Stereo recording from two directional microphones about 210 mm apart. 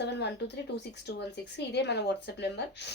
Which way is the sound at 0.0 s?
55° left (ahead or behind).